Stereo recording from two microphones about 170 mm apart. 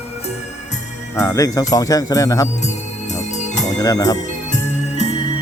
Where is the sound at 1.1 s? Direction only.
20° left (ahead or behind).